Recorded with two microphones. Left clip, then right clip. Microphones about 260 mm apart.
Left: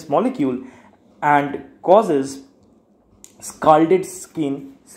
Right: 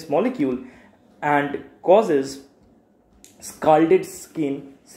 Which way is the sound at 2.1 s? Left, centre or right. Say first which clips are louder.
Left 1 dB; left.